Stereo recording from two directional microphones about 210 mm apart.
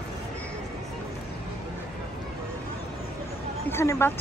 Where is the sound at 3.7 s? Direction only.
10° left (ahead or behind).